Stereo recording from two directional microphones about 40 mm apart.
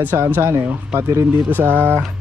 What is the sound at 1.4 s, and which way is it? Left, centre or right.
Speech, right.